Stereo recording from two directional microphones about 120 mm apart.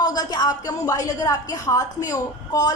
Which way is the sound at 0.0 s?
35° left (ahead or behind).